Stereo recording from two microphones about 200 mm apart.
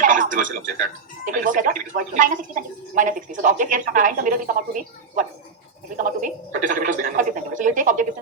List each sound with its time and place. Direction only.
0.0 s speech: 40° right (ahead or behind)